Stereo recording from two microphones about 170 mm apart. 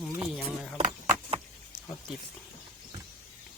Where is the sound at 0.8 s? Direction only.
35° right (ahead or behind).